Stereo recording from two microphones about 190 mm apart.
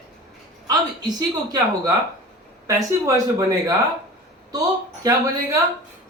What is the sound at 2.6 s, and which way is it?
Speech, 15° right (ahead or behind).